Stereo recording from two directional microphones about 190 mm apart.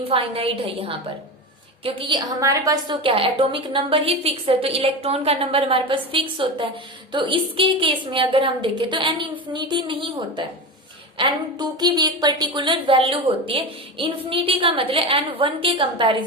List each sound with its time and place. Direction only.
0.0 s a woman's voice: 30° right (ahead or behind)